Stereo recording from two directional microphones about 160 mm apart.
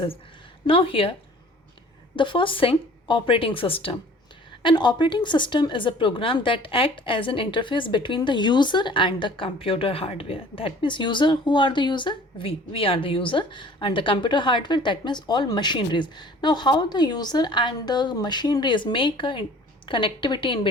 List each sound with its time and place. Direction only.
0.7 s speech: 35° left (ahead or behind)
2.1 s speech: 30° left (ahead or behind)